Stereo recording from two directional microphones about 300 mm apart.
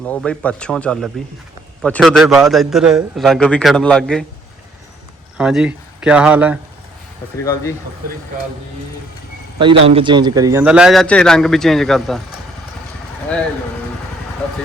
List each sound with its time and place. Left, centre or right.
0.0 s a man's voice: centre
5.4 s speech: centre
7.4 s speech: centre
9.8 s a man's voice: centre